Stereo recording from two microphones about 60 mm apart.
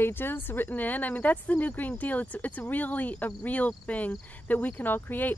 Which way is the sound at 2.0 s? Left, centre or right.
Left.